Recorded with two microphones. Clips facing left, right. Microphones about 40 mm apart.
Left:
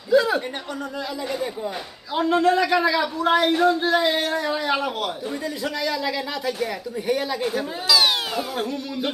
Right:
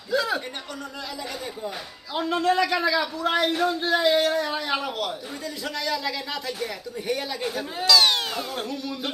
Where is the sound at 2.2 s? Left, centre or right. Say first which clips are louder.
Left 4 dB; centre.